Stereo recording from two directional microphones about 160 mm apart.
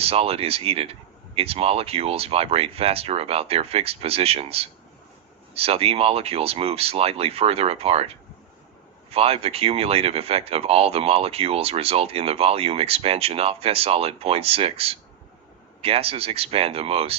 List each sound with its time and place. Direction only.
0.0 s speech: 35° right (ahead or behind)